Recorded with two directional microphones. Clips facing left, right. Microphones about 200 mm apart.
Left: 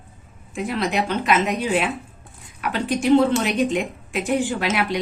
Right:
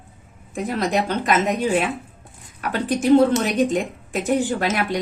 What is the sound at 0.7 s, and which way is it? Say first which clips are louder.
Speech: right 1 dB; 45° right (ahead or behind).